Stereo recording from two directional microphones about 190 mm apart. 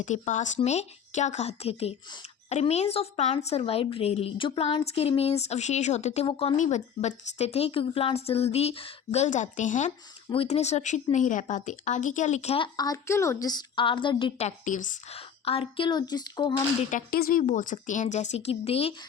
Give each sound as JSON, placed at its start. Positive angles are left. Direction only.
{"t": 0.0, "sound": "speech", "side_deg": 40}
{"t": 16.9, "sound": "speech", "side_deg": 50}